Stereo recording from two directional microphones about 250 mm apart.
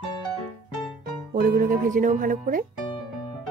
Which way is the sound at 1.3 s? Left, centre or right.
Right.